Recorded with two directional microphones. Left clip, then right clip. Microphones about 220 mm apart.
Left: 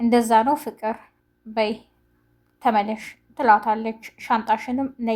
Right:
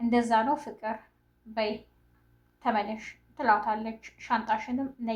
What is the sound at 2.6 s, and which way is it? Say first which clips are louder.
A woman's voice: left 8 dB; 40° left (ahead or behind).